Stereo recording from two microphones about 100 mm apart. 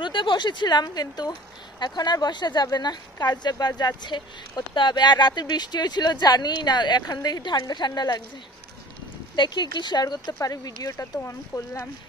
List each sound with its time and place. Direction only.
0.0 s speech: 50° left (ahead or behind)
9.3 s speech: 50° left (ahead or behind); by 11.9 s 30° left (ahead or behind)